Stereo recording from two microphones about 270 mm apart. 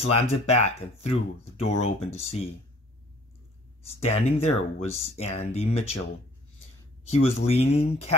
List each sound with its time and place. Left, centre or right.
0.0 s speech: left
4.0 s speech: left
7.1 s speech: left